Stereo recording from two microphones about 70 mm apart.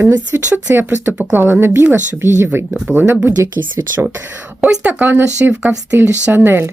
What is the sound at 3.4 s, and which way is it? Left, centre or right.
Speech, right.